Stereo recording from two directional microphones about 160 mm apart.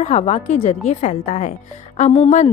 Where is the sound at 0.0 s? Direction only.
45° left (ahead or behind).